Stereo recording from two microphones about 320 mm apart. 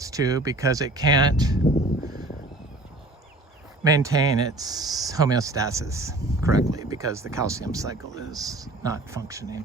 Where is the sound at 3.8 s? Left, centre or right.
Centre.